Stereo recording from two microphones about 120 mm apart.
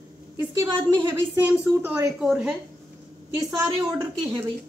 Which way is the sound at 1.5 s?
15° right (ahead or behind).